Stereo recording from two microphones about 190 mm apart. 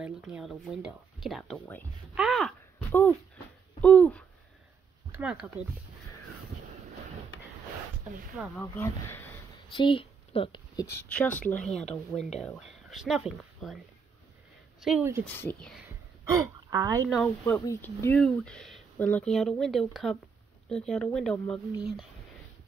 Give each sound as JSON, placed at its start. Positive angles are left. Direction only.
{"t": 0.0, "sound": "speech", "side_deg": -5}
{"t": 2.1, "sound": "a sound", "side_deg": 0}
{"t": 2.9, "sound": "speech", "side_deg": 10}
{"t": 5.1, "sound": "speech", "side_deg": -5}
{"t": 8.5, "sound": "speech", "side_deg": 15}
{"t": 9.8, "sound": "speech", "side_deg": 30}
{"t": 10.9, "sound": "speech", "side_deg": 10}
{"t": 11.6, "sound": "speech", "side_deg": 35}
{"t": 11.9, "sound": "speech", "side_deg": 5}
{"t": 14.8, "sound": "speech", "side_deg": -5}
{"t": 15.2, "sound": "speech", "side_deg": 10}
{"t": 16.3, "sound": "a woman's voice", "side_deg": -15}
{"t": 17.1, "sound": "speech", "side_deg": 0}
{"t": 17.6, "sound": "speech", "side_deg": 10}